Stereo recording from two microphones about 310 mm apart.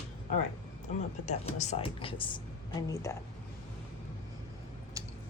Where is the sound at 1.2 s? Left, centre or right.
Left.